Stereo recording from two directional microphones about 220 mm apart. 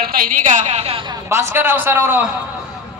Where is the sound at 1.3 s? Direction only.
10° right (ahead or behind).